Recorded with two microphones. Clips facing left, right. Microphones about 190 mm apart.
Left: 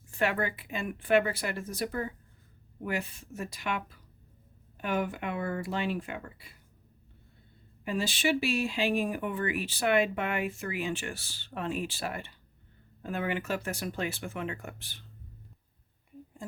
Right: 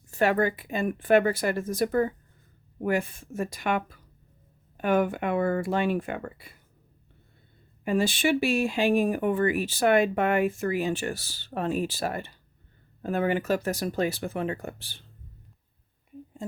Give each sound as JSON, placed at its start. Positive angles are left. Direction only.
{"t": 0.1, "sound": "speech", "side_deg": -40}
{"t": 7.9, "sound": "speech", "side_deg": -55}
{"t": 16.4, "sound": "a sound", "side_deg": -25}